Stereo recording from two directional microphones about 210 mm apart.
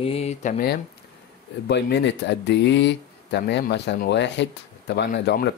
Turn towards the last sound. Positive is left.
turn(degrees=55)  # may be behind; listen again after turning